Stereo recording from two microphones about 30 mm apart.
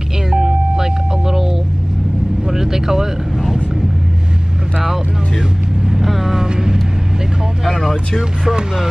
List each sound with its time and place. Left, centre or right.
0.3 s music: centre
2.5 s vehicle: centre
5.9 s vehicle: centre
6.3 s vehicle: centre
7.6 s vehicle: centre
8.2 s speech: centre